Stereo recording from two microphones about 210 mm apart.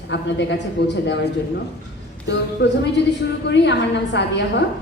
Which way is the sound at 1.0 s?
55° left (ahead or behind).